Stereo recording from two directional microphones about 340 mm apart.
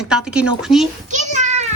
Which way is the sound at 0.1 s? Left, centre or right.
Centre.